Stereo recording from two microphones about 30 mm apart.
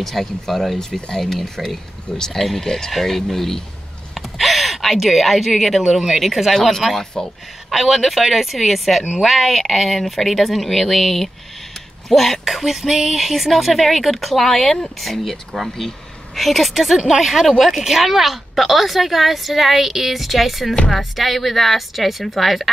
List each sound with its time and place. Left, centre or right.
0.0 s a woman's voice: centre
0.7 s speech: centre
4.2 s a sound: centre
5.9 s a woman's voice: centre
14.4 s a woman's voice: centre